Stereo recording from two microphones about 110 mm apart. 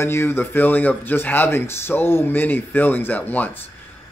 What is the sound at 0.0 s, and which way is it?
A man's voice, 25° left (ahead or behind).